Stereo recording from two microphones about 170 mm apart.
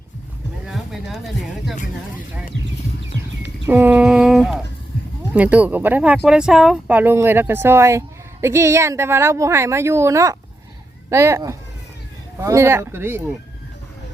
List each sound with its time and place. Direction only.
0.6 s speech: centre (ahead or behind)
3.7 s a sound: 10° right (ahead or behind)
5.3 s speech: 10° right (ahead or behind)